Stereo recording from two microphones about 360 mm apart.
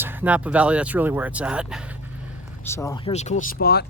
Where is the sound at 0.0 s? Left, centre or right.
Centre.